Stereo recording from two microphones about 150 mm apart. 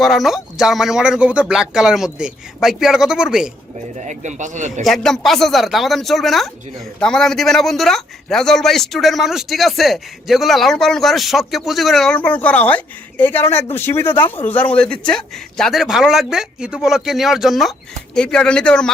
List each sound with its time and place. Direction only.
0.0 s speech: centre (ahead or behind)
4.0 s speech: 55° right (ahead or behind)
4.8 s speech: centre (ahead or behind)